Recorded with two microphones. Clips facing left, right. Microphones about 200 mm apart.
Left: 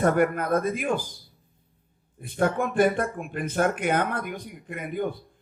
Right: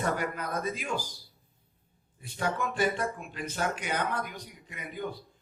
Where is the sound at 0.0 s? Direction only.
55° left (ahead or behind).